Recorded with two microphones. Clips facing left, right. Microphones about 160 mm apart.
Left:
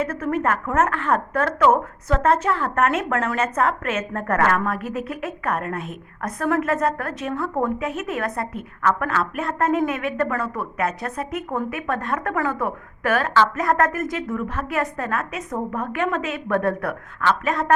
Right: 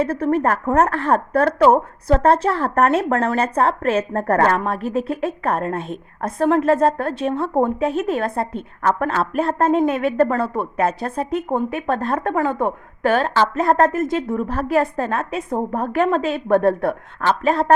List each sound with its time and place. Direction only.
0.0 s speech: 30° right (ahead or behind)